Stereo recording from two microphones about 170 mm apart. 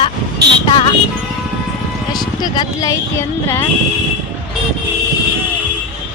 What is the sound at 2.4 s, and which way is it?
Speech, 20° left (ahead or behind).